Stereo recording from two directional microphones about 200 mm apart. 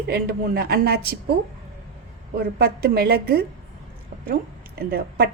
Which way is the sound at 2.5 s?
50° right (ahead or behind).